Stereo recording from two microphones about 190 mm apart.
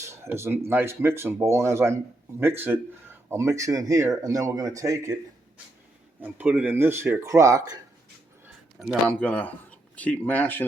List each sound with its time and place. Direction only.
0.0 s a sound: 15° right (ahead or behind)
0.7 s speech: 10° right (ahead or behind)
6.2 s speech: 10° right (ahead or behind)
9.0 s speech: 10° left (ahead or behind)